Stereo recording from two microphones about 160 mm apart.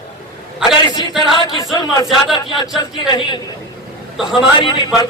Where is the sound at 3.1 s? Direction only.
30° left (ahead or behind).